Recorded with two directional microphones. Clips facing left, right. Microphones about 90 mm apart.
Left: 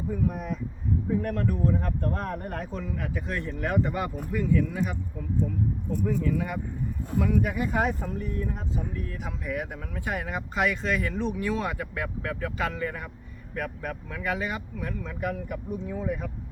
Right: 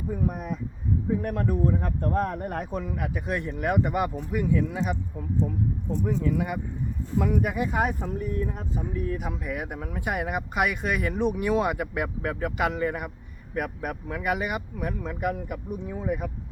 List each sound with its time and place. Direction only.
0.1 s speech: 15° right (ahead or behind)
6.1 s speech: 20° right (ahead or behind)